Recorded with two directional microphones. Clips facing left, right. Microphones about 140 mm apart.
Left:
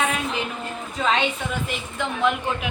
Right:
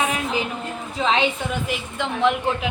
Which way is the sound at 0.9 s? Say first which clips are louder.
Right 2 dB; 20° right (ahead or behind).